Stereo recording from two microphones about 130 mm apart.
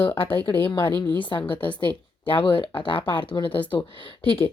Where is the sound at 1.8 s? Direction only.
40° left (ahead or behind).